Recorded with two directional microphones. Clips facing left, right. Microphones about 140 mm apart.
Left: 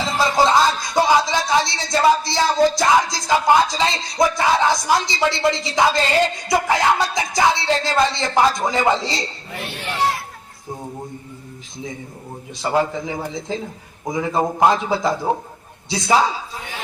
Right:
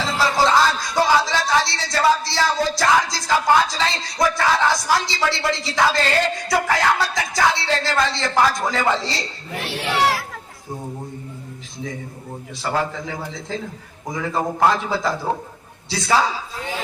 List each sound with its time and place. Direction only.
0.0 s music: 15° left (ahead or behind)
6.5 s speech: 15° left (ahead or behind)
9.6 s speech: 90° right
12.6 s speech: 20° left (ahead or behind)